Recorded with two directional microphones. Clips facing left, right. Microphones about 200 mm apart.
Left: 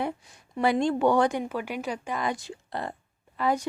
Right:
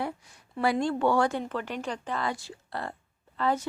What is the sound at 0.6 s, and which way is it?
A woman's voice, 20° left (ahead or behind).